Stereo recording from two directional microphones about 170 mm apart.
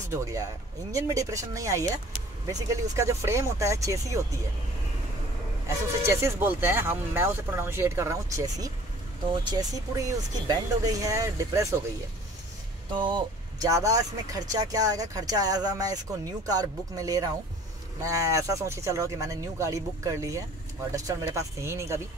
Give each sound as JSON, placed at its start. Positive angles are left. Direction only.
{"t": 0.1, "sound": "speech", "side_deg": -20}
{"t": 6.0, "sound": "speech", "side_deg": -15}
{"t": 12.9, "sound": "speech", "side_deg": -30}